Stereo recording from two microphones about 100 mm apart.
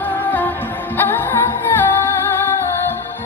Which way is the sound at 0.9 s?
25° left (ahead or behind).